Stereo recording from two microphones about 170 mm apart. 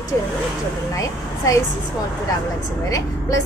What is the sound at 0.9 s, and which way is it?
Speech, 20° left (ahead or behind).